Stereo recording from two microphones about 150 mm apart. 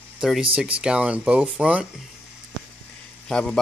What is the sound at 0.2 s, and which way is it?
Speech, 5° right (ahead or behind).